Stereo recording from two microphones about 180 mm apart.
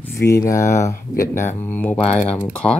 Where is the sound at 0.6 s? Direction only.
40° left (ahead or behind).